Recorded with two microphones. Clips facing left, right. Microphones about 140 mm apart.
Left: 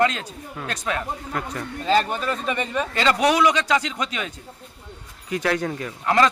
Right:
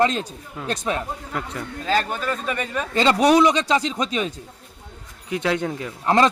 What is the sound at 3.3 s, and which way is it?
A man's voice, 30° right (ahead or behind).